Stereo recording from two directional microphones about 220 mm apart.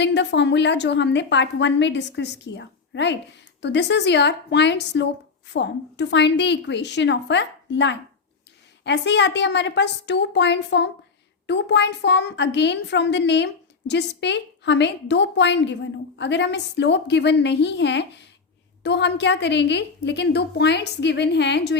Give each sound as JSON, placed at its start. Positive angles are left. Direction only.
{"t": 0.0, "sound": "a woman's voice", "side_deg": 50}